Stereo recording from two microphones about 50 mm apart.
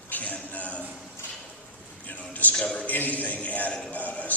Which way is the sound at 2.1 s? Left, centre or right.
Left.